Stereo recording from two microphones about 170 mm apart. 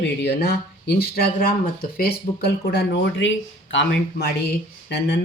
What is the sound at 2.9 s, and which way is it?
Speech, 90° left.